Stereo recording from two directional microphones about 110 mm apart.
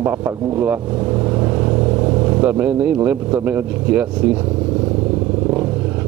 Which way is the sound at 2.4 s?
15° right (ahead or behind).